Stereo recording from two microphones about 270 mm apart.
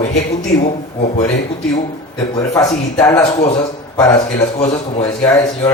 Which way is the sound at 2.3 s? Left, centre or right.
Centre.